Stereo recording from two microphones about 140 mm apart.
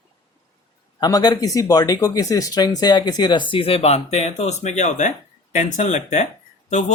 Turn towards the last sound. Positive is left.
turn(degrees=60)  # may be behind; listen again after turning